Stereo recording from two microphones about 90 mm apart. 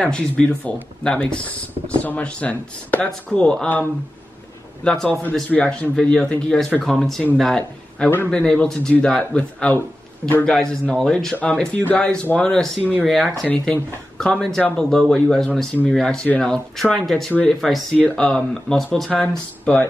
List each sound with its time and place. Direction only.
0.0 s speech: 10° left (ahead or behind)
4.8 s a man's voice: 5° left (ahead or behind)
17.9 s a man's voice: 10° left (ahead or behind)
19.3 s speech: 15° left (ahead or behind)